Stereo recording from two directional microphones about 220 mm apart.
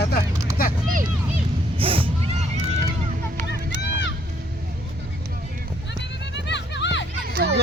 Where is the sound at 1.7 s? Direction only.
25° right (ahead or behind).